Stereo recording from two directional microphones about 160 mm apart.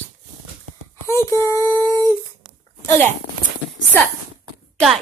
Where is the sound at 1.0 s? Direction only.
15° left (ahead or behind).